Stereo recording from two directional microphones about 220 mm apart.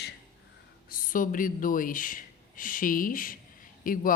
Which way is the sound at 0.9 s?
40° left (ahead or behind).